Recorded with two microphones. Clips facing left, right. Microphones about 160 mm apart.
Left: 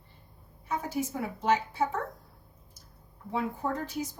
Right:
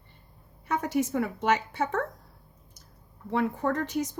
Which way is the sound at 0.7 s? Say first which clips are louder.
Right 5 dB; 80° right.